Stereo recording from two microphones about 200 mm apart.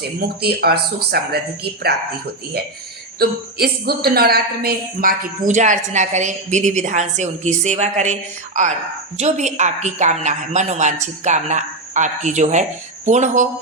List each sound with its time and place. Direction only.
0.2 s speech: 50° right (ahead or behind)
3.2 s a woman's voice: 50° right (ahead or behind)